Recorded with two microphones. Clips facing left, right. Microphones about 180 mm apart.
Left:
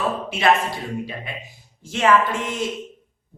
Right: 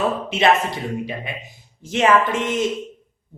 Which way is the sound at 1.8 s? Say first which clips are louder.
Right 1 dB; 20° right (ahead or behind).